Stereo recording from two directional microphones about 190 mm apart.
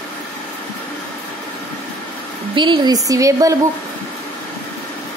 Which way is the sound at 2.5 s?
25° right (ahead or behind).